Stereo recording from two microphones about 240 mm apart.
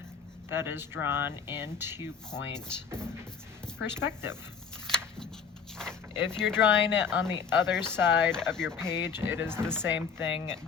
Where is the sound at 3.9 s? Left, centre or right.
Centre.